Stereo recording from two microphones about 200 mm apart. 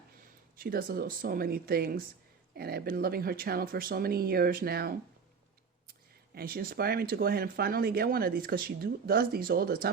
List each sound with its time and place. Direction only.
0.5 s speech: 45° right (ahead or behind)